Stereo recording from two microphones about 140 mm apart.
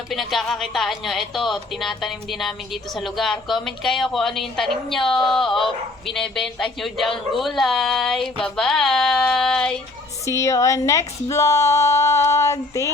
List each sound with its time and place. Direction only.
0.1 s speech: centre (ahead or behind)
10.2 s a woman's voice: 20° left (ahead or behind)